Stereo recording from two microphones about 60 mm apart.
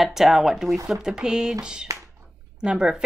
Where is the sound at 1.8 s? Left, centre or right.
Right.